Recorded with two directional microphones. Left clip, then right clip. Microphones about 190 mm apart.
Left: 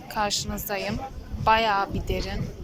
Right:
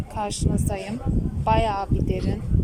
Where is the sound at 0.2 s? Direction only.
20° right (ahead or behind).